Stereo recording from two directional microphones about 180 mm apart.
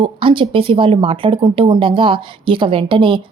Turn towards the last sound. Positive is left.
turn(degrees=-30)  # may be behind; listen again after turning